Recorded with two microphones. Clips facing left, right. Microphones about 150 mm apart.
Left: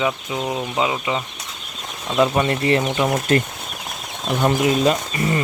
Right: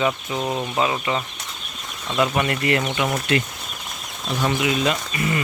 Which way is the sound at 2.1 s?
25° left (ahead or behind).